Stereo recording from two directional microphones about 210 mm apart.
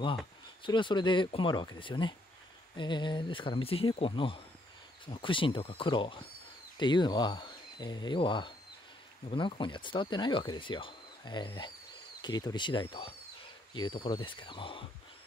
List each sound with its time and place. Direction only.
0.7 s speech: 20° left (ahead or behind)
14.0 s speech: 20° left (ahead or behind)